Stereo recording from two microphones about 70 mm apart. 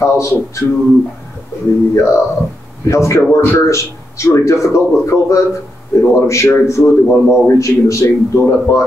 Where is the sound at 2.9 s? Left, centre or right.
Left.